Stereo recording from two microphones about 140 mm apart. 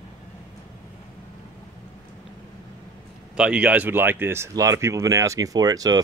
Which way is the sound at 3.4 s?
10° right (ahead or behind).